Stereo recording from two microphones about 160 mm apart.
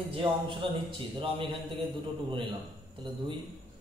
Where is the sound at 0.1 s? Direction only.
30° right (ahead or behind).